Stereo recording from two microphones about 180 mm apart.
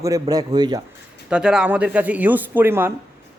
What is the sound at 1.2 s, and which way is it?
Speech, 5° right (ahead or behind).